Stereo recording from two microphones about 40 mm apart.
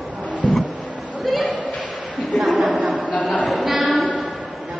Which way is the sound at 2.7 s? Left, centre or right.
Right.